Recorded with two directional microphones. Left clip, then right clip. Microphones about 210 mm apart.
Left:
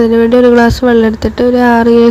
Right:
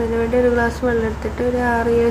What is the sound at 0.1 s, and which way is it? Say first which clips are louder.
Speech: left 10 dB; 45° left (ahead or behind).